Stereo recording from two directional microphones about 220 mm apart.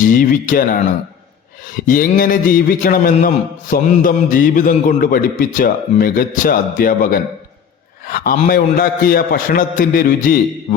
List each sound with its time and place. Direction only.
0.0 s a man's voice: 40° left (ahead or behind)